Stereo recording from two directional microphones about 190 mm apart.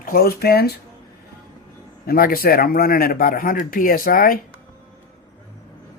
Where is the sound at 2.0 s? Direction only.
50° left (ahead or behind).